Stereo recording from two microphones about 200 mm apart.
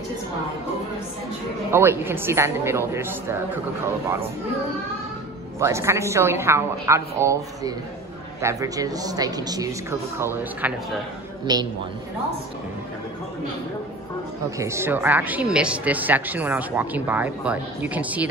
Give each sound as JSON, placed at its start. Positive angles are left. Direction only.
{"t": 1.7, "sound": "speech", "side_deg": -10}
{"t": 5.6, "sound": "speech", "side_deg": -15}
{"t": 11.5, "sound": "a woman's voice", "side_deg": -20}
{"t": 14.6, "sound": "speech", "side_deg": -15}